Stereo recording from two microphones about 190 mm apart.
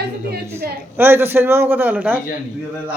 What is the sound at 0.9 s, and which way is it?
A man's voice, 10° right (ahead or behind).